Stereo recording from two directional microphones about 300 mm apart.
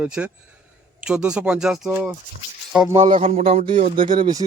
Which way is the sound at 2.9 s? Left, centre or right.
Right.